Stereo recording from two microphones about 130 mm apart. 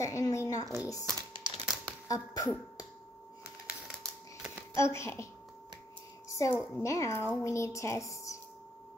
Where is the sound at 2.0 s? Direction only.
25° left (ahead or behind).